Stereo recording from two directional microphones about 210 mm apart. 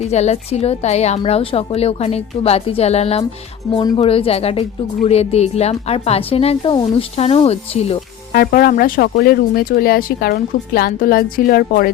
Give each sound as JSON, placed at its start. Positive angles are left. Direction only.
{"t": 0.0, "sound": "a woman's voice", "side_deg": 30}
{"t": 8.3, "sound": "speech", "side_deg": 45}